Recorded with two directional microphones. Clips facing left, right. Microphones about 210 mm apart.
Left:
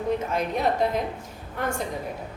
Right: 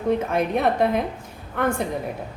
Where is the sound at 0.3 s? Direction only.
60° right (ahead or behind).